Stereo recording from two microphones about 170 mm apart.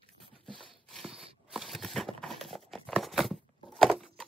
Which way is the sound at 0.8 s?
Centre (ahead or behind).